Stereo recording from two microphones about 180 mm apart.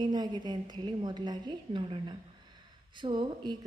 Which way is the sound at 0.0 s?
25° right (ahead or behind).